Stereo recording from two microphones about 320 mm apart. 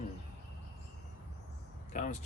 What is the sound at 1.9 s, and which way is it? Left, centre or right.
Speech, left.